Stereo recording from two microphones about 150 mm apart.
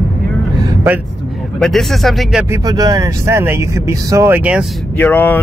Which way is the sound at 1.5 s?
5° left (ahead or behind).